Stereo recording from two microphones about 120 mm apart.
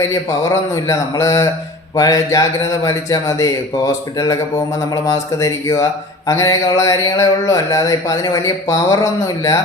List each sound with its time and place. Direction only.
0.1 s speech: 25° left (ahead or behind)
5.4 s speech: 25° left (ahead or behind)